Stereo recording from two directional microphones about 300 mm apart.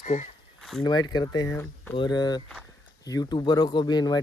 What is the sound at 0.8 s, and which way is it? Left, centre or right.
Speech, centre.